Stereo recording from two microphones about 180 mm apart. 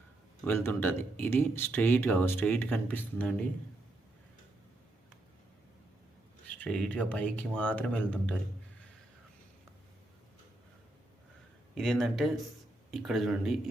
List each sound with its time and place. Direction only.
0.4 s speech: 10° left (ahead or behind)
6.5 s speech: 5° left (ahead or behind)
11.7 s speech: centre (ahead or behind)